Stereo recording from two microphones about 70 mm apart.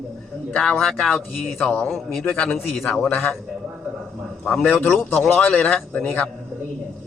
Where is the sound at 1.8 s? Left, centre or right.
Centre.